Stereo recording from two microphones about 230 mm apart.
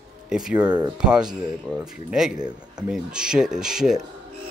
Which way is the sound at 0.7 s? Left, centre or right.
Centre.